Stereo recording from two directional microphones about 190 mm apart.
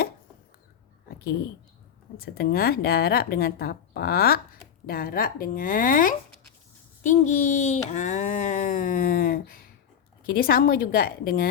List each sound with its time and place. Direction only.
2.1 s speech: 50° left (ahead or behind)